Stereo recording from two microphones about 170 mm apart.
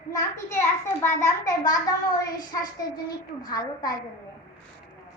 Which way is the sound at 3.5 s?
25° left (ahead or behind).